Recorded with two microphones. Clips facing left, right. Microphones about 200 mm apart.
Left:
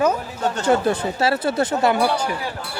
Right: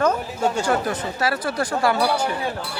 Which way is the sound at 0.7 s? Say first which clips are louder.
Left 4 dB; 25° left (ahead or behind).